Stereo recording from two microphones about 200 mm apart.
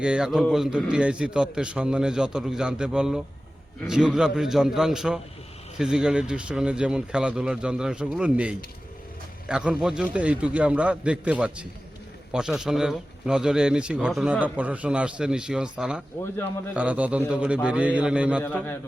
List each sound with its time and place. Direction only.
0.0 s a man's voice: 5° right (ahead or behind)
18.4 s a man's voice: 10° left (ahead or behind)